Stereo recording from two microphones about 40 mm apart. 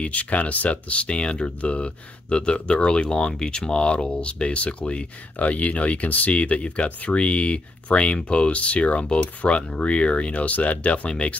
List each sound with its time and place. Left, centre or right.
0.0 s speech: left